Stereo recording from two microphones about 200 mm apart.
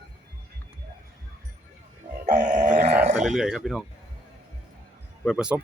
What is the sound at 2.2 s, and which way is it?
Dog, 35° right (ahead or behind).